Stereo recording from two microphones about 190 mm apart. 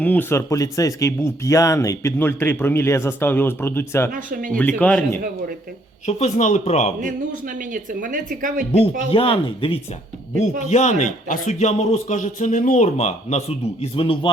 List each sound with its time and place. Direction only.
0.0 s speech: 10° left (ahead or behind)
4.1 s speech: 45° right (ahead or behind)
4.5 s speech: 5° left (ahead or behind)
6.1 s a man's voice: 35° left (ahead or behind)
7.7 s speech: 45° right (ahead or behind)
8.7 s a man's voice: 30° left (ahead or behind)